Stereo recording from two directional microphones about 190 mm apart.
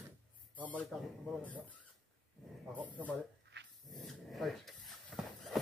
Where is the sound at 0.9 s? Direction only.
Centre (ahead or behind).